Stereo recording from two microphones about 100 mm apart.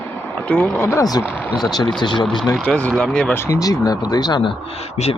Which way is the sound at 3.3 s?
30° left (ahead or behind).